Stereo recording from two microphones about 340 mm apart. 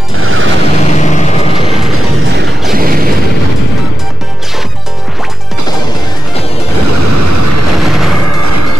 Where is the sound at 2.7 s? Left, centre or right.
Right.